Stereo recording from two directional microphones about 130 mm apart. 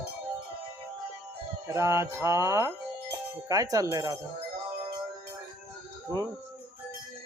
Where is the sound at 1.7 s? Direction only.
20° right (ahead or behind).